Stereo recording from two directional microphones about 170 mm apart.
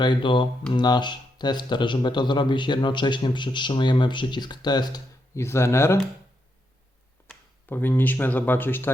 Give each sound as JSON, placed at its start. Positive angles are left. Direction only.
{"t": 0.0, "sound": "speech", "side_deg": 30}
{"t": 7.3, "sound": "speech", "side_deg": 10}